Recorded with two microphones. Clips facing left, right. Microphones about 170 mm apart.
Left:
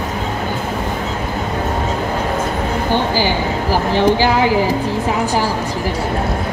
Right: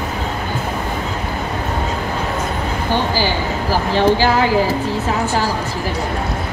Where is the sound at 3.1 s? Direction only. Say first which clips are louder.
Left 2 dB; 15° left (ahead or behind).